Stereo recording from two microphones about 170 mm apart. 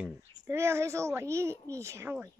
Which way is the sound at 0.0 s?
15° right (ahead or behind).